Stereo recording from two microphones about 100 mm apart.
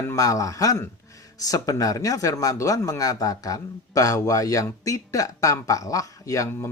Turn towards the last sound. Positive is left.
turn(degrees=30)  # may be behind; listen again after turning